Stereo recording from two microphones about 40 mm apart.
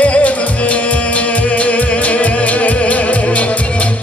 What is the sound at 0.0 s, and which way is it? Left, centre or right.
Music, left.